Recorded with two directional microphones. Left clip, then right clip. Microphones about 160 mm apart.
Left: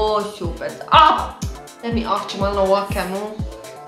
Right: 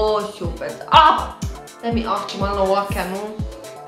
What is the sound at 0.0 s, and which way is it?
A woman's voice, centre (ahead or behind).